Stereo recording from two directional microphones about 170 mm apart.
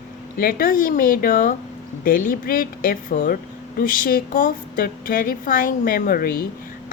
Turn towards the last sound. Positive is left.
turn(degrees=60)  # may be behind; listen again after turning